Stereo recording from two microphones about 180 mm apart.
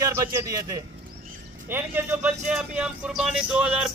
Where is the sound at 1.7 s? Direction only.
10° right (ahead or behind).